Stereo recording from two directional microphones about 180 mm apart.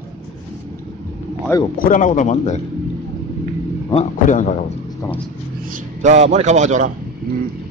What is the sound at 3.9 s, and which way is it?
Speech, 45° left (ahead or behind).